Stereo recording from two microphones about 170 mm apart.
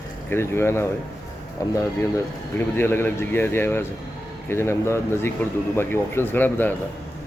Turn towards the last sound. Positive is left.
turn(degrees=10)  # may be behind; listen again after turning